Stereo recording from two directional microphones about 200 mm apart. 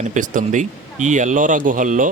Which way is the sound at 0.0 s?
40° right (ahead or behind).